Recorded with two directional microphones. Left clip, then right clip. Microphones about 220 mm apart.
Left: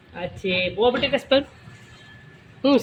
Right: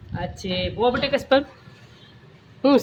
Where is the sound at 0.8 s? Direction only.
5° left (ahead or behind).